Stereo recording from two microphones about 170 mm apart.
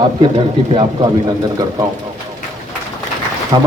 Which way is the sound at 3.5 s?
25° right (ahead or behind).